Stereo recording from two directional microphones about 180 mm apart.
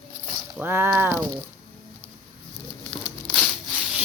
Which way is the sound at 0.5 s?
10° right (ahead or behind).